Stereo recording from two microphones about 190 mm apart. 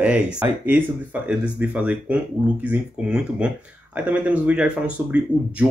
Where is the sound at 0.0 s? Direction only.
5° right (ahead or behind).